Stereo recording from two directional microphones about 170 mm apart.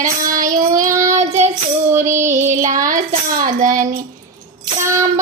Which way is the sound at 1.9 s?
15° right (ahead or behind).